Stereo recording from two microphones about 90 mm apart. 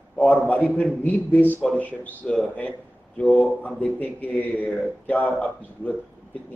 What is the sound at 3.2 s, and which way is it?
Speech, 5° left (ahead or behind).